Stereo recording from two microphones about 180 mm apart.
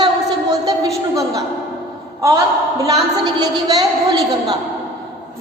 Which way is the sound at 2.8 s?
20° right (ahead or behind).